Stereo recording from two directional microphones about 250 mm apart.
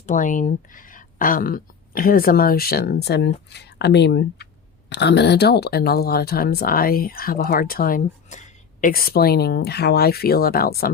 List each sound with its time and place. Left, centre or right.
0.0 s speech: left